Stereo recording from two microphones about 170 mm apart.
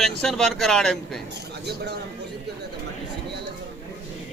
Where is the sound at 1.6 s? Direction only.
80° right.